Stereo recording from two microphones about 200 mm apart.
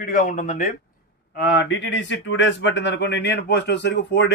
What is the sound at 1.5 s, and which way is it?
Speech, 60° left (ahead or behind).